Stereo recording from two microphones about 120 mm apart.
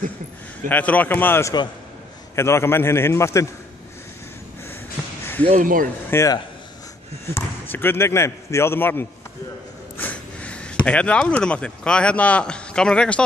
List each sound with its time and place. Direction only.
0.7 s a man's voice: 15° left (ahead or behind)
5.4 s speech: 65° right (ahead or behind)
6.0 s speech: 25° left (ahead or behind)
7.3 s a man's voice: 15° left (ahead or behind)